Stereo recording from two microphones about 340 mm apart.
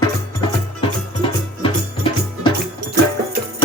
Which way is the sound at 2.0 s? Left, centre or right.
Centre.